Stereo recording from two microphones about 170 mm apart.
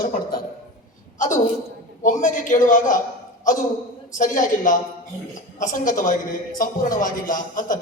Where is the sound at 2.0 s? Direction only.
50° left (ahead or behind).